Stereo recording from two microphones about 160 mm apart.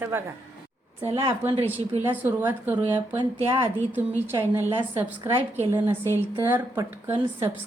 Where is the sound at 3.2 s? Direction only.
30° right (ahead or behind).